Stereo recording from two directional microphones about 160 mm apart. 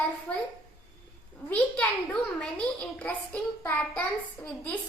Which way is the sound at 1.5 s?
5° left (ahead or behind).